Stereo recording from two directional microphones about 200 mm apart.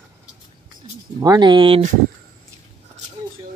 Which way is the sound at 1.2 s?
20° right (ahead or behind).